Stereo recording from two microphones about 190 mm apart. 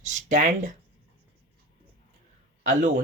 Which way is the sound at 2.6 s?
40° right (ahead or behind).